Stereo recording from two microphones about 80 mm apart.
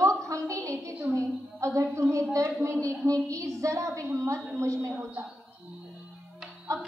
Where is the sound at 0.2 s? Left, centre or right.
Right.